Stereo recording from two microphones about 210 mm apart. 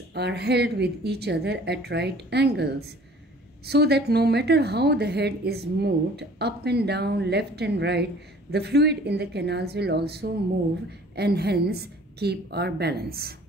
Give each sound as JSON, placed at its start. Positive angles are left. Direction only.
{"t": 0.1, "sound": "a woman's voice", "side_deg": -55}